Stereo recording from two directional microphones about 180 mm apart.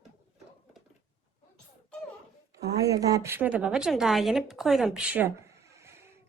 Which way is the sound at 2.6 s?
20° right (ahead or behind).